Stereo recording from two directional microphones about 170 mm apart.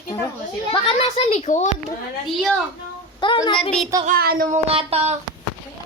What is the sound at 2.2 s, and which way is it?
Speech, centre (ahead or behind).